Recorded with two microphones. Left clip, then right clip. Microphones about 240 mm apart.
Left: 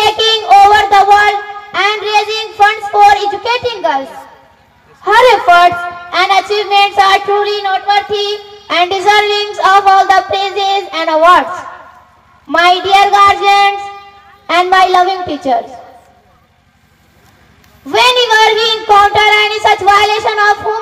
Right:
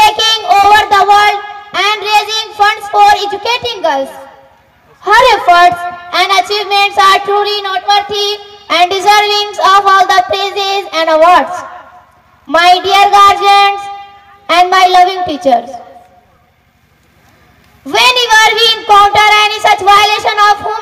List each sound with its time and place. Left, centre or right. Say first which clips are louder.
0.0 s a sound: right 2 dB; right
5.0 s a woman's voice: even; right
17.8 s a woman's voice: even; right